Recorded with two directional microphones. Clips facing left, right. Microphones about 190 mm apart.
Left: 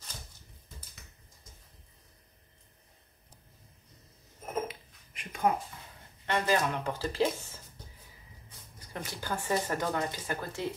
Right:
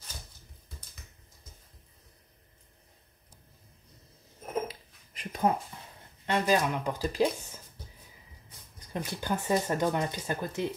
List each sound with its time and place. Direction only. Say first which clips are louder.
4.6 s a sound: even; 35° right (ahead or behind)
6.2 s speech: right 2 dB; 15° right (ahead or behind)
8.9 s speech: right 4 dB; 20° right (ahead or behind)